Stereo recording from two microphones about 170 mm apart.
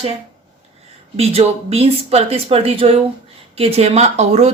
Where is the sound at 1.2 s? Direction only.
35° right (ahead or behind).